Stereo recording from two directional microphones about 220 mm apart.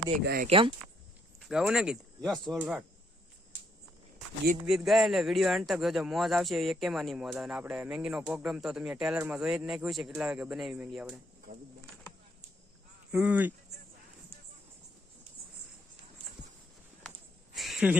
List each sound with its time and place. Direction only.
0.4 s speech: 25° right (ahead or behind)
1.4 s speech: centre (ahead or behind)
4.6 s speech: centre (ahead or behind)
11.5 s speech: 40° right (ahead or behind)
13.1 s speech: 5° right (ahead or behind)
17.5 s a sound: centre (ahead or behind)